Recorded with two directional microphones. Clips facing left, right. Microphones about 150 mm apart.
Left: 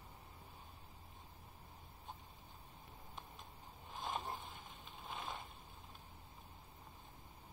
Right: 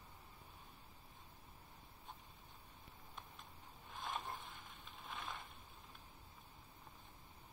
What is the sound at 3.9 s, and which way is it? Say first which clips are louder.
Vehicle: left 3 dB; centre (ahead or behind).